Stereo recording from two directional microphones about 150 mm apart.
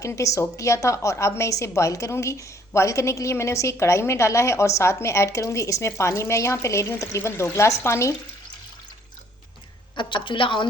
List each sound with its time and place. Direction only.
0.0 s a woman's voice: 20° left (ahead or behind)
9.9 s a woman's voice: 30° left (ahead or behind)